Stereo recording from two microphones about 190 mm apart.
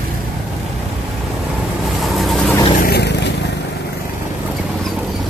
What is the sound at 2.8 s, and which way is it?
Vehicle, 60° left (ahead or behind).